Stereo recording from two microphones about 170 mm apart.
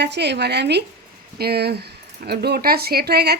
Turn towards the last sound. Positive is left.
turn(degrees=-70)  # may be behind; listen again after turning